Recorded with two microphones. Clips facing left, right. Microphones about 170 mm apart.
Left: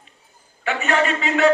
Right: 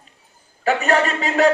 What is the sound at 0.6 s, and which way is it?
Speech, 40° right (ahead or behind).